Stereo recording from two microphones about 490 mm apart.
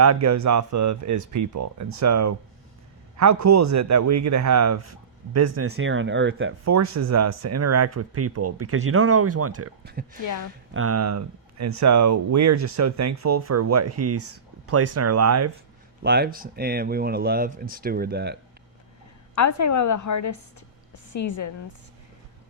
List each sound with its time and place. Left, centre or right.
0.0 s speech: right
10.2 s a woman's voice: left
10.8 s speech: right
16.0 s speech: centre
19.3 s a woman's voice: left